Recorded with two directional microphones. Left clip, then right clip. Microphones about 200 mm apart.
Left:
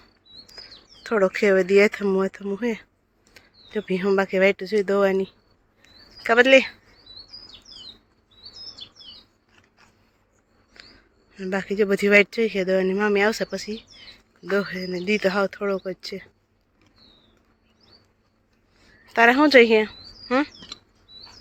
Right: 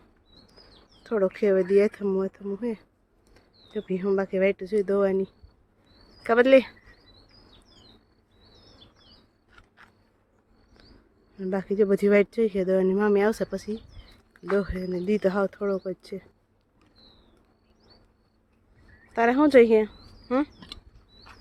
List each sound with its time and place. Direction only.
1.0 s speech: centre (ahead or behind)
11.3 s speech: 15° right (ahead or behind)
19.0 s speech: 5° right (ahead or behind)